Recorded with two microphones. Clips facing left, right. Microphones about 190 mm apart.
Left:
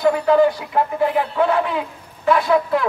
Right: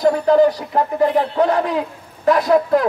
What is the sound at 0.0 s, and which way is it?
Speech, 40° right (ahead or behind).